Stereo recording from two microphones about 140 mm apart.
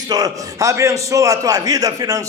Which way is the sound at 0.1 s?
25° right (ahead or behind).